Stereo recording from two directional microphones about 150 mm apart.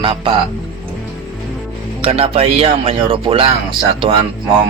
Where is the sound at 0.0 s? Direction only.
35° right (ahead or behind).